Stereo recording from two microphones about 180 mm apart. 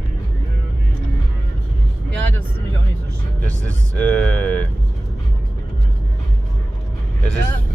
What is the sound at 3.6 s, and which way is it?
Speech, 5° left (ahead or behind).